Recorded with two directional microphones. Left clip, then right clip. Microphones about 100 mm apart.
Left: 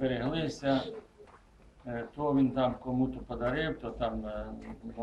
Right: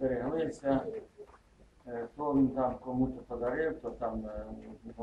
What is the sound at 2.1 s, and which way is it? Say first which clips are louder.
Speech: left 1 dB; 5° left (ahead or behind).